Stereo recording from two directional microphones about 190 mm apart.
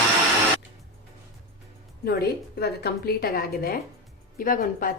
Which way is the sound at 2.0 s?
55° left (ahead or behind).